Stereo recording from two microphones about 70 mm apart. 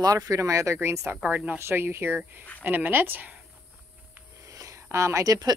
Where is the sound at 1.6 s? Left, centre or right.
Right.